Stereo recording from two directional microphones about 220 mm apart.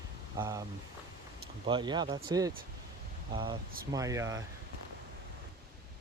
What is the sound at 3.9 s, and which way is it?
Speech, 15° right (ahead or behind).